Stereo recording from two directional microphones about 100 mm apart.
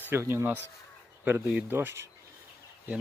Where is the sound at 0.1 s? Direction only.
25° right (ahead or behind).